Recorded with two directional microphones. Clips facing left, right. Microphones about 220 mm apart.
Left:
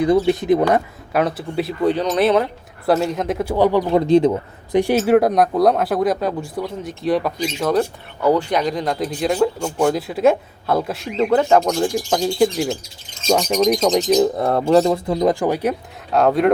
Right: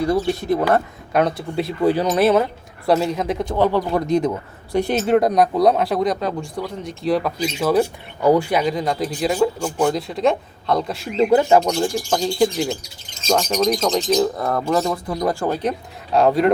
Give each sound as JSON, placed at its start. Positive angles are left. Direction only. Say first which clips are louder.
{"t": 0.0, "sound": "speech", "louder": "left 4 dB", "side_deg": 20}
{"t": 1.1, "sound": "speech", "louder": "even", "side_deg": 0}
{"t": 4.0, "sound": "speech", "louder": "left 5 dB", "side_deg": 30}
{"t": 4.7, "sound": "speech", "louder": "left 3 dB", "side_deg": 15}
{"t": 11.2, "sound": "speech", "louder": "right 1 dB", "side_deg": -10}
{"t": 14.2, "sound": "speech", "louder": "left 3 dB", "side_deg": 25}
{"t": 16.1, "sound": "speech", "louder": "even", "side_deg": 0}